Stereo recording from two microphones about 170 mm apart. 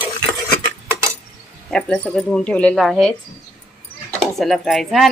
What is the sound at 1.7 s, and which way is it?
Speech, 5° left (ahead or behind).